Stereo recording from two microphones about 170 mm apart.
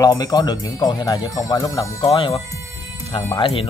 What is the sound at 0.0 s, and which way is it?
Speech, 20° left (ahead or behind).